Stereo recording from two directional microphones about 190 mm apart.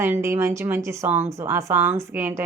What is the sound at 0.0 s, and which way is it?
Speech, 15° right (ahead or behind).